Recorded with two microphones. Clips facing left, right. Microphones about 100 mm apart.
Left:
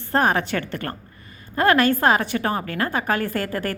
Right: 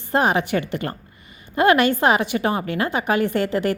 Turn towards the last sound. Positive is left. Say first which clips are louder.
# right 5 dB
turn(degrees=-20)  # may be behind; listen again after turning